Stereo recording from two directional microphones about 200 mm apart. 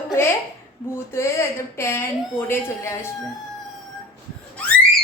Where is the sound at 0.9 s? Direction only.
15° left (ahead or behind).